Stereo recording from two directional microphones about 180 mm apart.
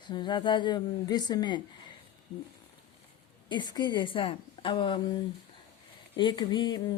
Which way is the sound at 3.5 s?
25° left (ahead or behind).